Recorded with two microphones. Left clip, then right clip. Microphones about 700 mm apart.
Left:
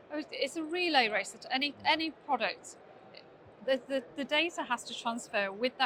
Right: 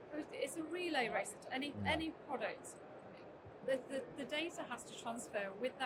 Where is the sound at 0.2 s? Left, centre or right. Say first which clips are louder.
Left 8 dB; left.